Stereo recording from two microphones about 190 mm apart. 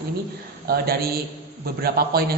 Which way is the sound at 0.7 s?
55° right (ahead or behind).